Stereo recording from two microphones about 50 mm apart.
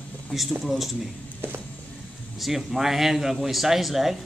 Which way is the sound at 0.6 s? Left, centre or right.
Centre.